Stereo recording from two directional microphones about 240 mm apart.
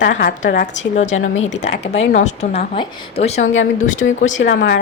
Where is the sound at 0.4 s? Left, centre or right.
Left.